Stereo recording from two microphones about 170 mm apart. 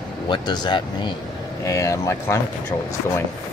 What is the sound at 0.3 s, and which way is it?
Speech, 25° left (ahead or behind).